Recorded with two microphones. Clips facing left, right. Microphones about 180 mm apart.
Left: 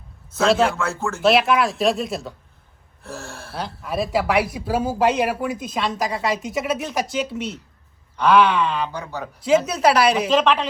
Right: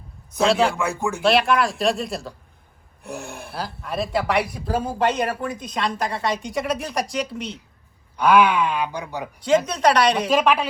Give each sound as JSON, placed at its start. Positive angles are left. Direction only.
{"t": 0.3, "sound": "speech", "side_deg": 0}
{"t": 0.8, "sound": "speech", "side_deg": -15}
{"t": 1.2, "sound": "speech", "side_deg": 0}
{"t": 3.0, "sound": "speech", "side_deg": -15}
{"t": 3.5, "sound": "speech", "side_deg": 0}
{"t": 8.1, "sound": "speech", "side_deg": -10}
{"t": 9.6, "sound": "speech", "side_deg": 5}
{"t": 10.2, "sound": "speech", "side_deg": -10}